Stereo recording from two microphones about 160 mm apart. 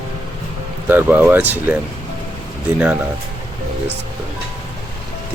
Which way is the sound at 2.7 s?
10° right (ahead or behind).